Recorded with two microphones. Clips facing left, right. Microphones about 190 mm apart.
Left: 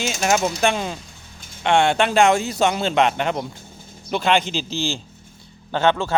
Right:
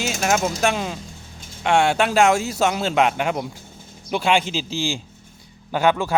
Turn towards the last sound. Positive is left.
turn(degrees=-15)  # may be behind; listen again after turning